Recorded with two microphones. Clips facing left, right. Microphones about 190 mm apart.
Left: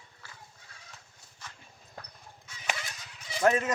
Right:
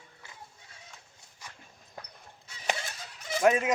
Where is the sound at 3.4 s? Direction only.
10° right (ahead or behind).